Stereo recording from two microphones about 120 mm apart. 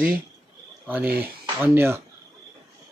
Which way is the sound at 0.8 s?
15° right (ahead or behind).